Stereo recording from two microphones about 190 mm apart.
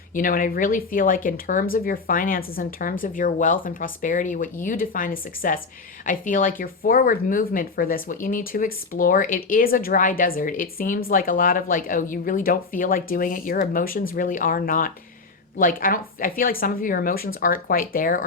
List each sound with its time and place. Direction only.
0.1 s speech: 45° left (ahead or behind)